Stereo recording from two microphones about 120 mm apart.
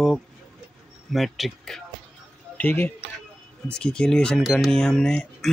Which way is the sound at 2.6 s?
15° left (ahead or behind).